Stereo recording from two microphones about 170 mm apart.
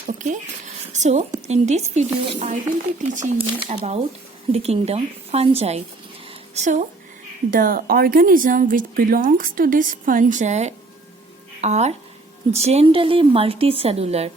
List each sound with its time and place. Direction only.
0.2 s a woman's voice: 45° right (ahead or behind)
7.5 s a woman's voice: 55° right (ahead or behind); by 14.3 s 40° right (ahead or behind)